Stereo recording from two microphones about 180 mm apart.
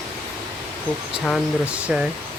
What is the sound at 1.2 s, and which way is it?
Speech, 5° right (ahead or behind).